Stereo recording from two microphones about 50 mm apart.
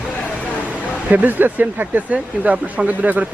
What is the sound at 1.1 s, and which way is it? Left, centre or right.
Speech, right.